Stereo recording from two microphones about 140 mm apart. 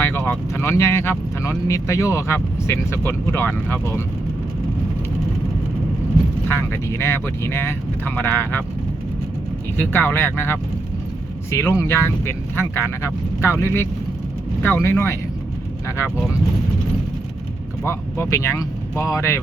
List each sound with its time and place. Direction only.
0.0 s speech: 15° left (ahead or behind)
6.5 s speech: 15° left (ahead or behind)
9.7 s speech: 15° left (ahead or behind)
17.8 s speech: 20° left (ahead or behind)